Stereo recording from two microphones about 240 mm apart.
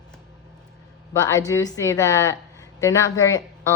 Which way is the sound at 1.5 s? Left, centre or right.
Centre.